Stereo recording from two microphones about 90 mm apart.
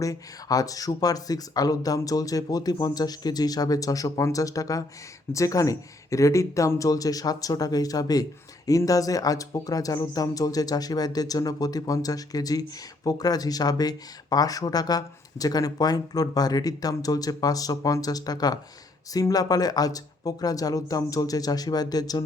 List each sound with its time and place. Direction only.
0.0 s speech: 40° left (ahead or behind)